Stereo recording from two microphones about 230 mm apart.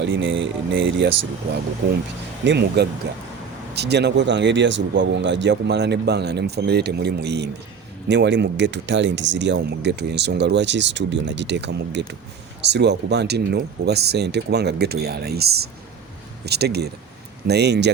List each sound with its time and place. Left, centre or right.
0.0 s speech: right
2.4 s speech: right